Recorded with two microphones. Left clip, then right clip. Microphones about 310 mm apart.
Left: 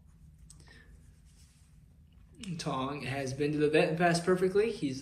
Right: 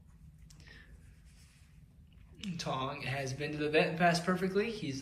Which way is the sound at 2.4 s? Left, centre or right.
Centre.